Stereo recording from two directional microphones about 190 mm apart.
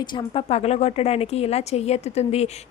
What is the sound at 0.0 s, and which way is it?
Speech, 25° left (ahead or behind).